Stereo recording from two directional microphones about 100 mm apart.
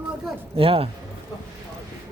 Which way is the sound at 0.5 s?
70° right (ahead or behind).